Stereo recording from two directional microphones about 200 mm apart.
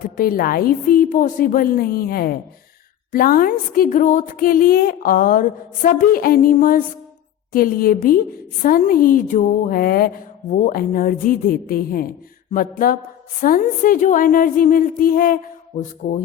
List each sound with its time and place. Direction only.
0.0 s speech: 45° left (ahead or behind)
15.8 s music: 40° left (ahead or behind)